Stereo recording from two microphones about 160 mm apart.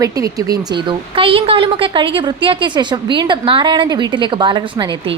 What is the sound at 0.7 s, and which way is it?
A woman's voice, 30° right (ahead or behind).